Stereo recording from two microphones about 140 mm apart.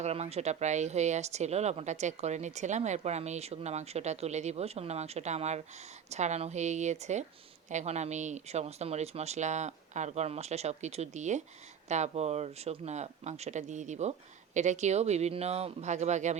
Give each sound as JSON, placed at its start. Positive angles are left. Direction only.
{"t": 0.0, "sound": "speech", "side_deg": -50}